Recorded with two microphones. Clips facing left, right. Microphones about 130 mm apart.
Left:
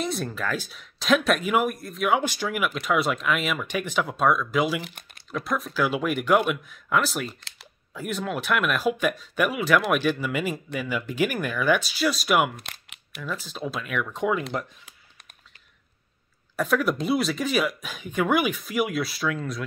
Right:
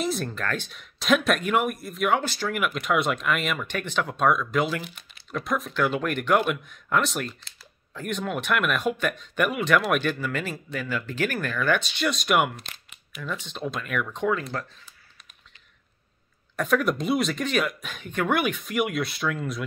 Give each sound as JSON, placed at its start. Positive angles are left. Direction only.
{"t": 0.0, "sound": "speech", "side_deg": 0}
{"t": 2.1, "sound": "speech", "side_deg": 10}
{"t": 12.5, "sound": "a sound", "side_deg": 60}
{"t": 13.2, "sound": "speech", "side_deg": 5}
{"t": 16.5, "sound": "speech", "side_deg": 0}